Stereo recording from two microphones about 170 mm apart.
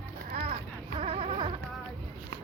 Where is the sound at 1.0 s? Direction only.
35° right (ahead or behind).